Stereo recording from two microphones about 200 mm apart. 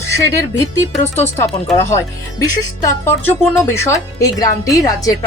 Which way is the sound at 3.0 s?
15° left (ahead or behind).